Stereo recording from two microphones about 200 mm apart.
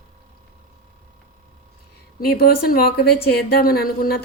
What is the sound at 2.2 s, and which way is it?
Speech, 50° left (ahead or behind).